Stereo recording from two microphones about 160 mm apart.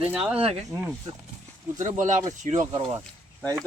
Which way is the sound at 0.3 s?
35° right (ahead or behind).